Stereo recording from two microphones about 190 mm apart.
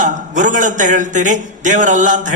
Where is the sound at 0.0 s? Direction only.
40° right (ahead or behind).